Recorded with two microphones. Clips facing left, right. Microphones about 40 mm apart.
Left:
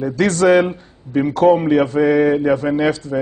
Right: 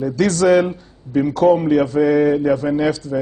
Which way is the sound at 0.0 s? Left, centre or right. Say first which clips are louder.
Left 1 dB; left.